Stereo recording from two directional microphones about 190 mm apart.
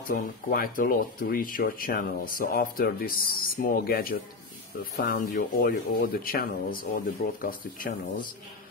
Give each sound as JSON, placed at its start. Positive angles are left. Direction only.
{"t": 0.0, "sound": "speech", "side_deg": 50}